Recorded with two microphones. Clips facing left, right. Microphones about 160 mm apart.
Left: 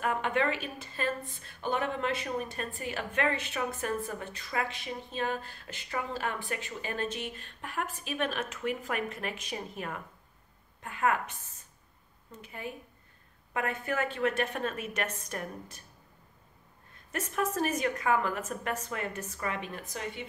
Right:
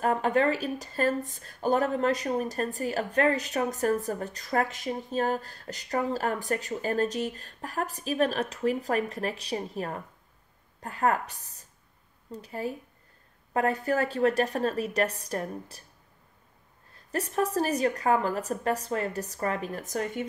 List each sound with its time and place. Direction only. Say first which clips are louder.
0.0 s a woman's voice: right 5 dB; 35° right (ahead or behind)
16.9 s a woman's voice: right 5 dB; 35° right (ahead or behind)